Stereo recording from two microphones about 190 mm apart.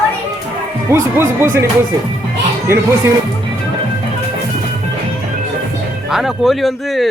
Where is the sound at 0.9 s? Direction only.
15° right (ahead or behind).